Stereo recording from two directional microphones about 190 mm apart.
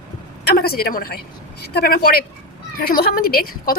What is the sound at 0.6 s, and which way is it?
Speech, 55° left (ahead or behind).